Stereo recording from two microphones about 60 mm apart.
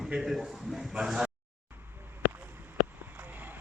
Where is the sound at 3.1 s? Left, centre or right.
Right.